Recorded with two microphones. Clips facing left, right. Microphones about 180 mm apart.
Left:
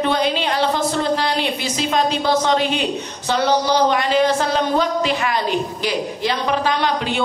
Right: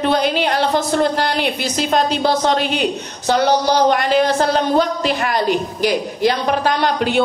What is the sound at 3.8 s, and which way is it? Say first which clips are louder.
Speech: right 2 dB; 50° right (ahead or behind).